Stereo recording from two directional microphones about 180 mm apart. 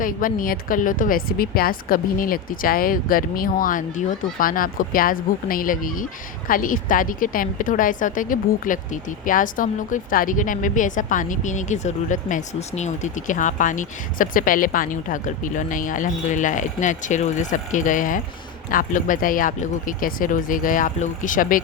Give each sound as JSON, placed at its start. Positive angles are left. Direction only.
{"t": 0.0, "sound": "a woman's voice", "side_deg": 50}